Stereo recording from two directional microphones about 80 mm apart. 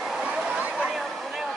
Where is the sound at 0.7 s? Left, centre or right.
Centre.